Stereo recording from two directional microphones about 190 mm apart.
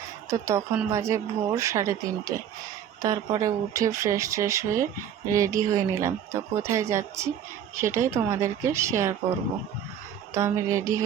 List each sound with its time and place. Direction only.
0.3 s speech: 15° right (ahead or behind)
10.3 s speech: 15° right (ahead or behind)